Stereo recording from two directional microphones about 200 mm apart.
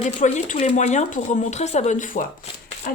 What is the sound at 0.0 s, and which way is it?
Speech, 35° left (ahead or behind).